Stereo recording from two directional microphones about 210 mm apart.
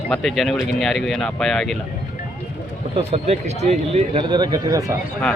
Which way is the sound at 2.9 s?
30° right (ahead or behind).